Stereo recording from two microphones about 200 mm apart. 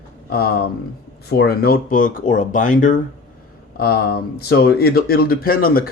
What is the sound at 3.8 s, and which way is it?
Speech, 50° left (ahead or behind).